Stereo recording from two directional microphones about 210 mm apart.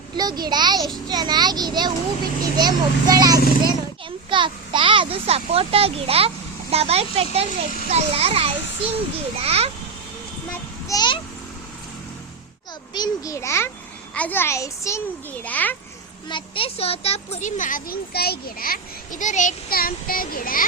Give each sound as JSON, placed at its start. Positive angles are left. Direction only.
{"t": 0.2, "sound": "a child's voice", "side_deg": -20}
{"t": 10.8, "sound": "a child's voice", "side_deg": 20}
{"t": 12.9, "sound": "a woman's voice", "side_deg": 15}
{"t": 16.3, "sound": "speech", "side_deg": 25}